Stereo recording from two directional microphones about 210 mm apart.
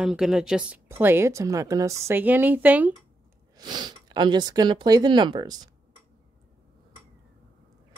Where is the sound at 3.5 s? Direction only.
20° right (ahead or behind).